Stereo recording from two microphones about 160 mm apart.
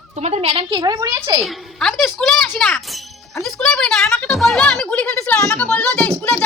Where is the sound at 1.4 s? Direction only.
Centre (ahead or behind).